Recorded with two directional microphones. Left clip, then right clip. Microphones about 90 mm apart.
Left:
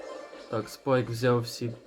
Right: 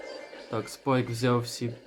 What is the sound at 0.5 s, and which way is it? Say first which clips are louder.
Speech: left 1 dB; 5° right (ahead or behind).